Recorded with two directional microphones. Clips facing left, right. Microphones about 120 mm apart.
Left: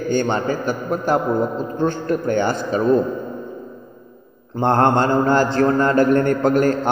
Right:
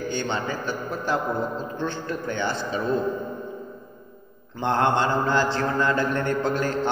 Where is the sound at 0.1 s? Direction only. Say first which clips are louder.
Left 11 dB; 45° left (ahead or behind).